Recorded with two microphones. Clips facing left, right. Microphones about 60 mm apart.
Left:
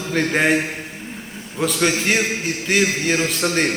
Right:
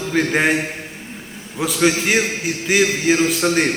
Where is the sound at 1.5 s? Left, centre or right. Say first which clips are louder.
Right 2 dB; centre.